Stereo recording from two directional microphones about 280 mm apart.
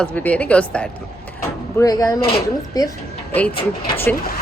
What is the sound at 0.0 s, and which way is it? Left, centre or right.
A woman's voice, centre.